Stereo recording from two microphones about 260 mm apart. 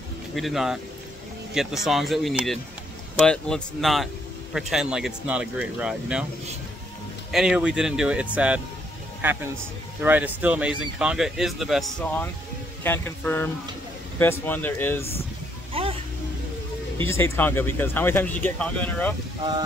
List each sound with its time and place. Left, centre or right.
0.4 s speech: centre
7.2 s speech: centre
15.7 s music: right
17.0 s speech: centre